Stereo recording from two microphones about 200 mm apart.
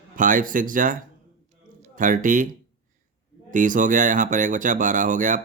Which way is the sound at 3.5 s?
40° right (ahead or behind).